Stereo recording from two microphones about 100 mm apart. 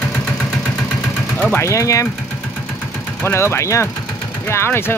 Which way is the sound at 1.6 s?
30° left (ahead or behind).